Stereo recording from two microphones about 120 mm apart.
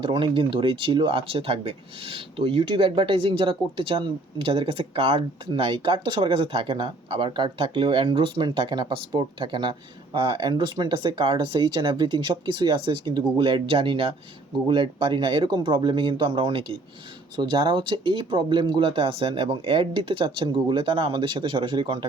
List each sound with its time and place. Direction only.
0.0 s speech: 45° right (ahead or behind)